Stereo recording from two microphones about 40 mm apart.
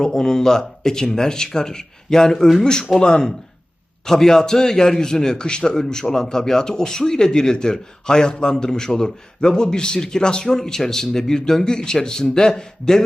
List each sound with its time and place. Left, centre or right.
0.0 s a man's voice: centre